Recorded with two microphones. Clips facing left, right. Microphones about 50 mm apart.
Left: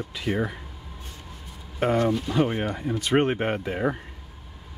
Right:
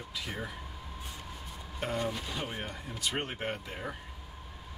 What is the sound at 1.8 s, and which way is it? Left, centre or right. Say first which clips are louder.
Speech: left 11 dB; left.